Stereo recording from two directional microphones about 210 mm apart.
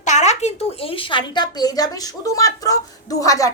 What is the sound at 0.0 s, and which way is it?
A woman's voice, 35° left (ahead or behind).